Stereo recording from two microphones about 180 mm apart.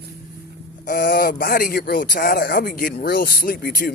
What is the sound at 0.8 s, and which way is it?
Speech, 60° left (ahead or behind).